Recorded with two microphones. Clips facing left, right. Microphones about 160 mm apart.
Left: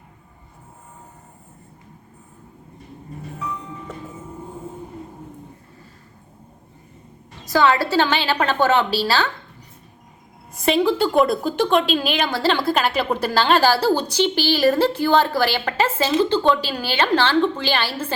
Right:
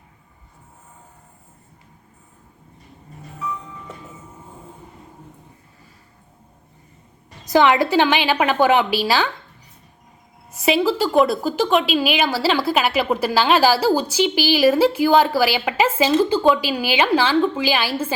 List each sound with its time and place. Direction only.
7.4 s a woman's voice: 20° right (ahead or behind)
10.6 s a woman's voice: 5° right (ahead or behind)